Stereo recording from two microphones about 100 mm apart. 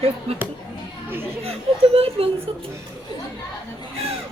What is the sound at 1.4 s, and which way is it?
Speech, 80° right.